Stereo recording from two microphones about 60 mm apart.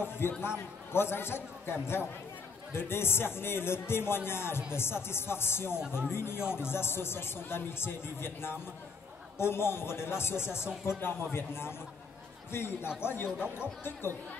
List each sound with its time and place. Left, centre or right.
0.2 s speech: left